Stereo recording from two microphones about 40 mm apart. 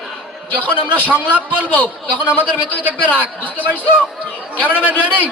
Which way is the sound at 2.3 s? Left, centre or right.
Left.